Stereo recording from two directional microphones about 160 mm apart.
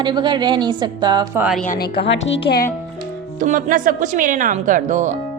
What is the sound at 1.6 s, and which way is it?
Speech, 55° left (ahead or behind).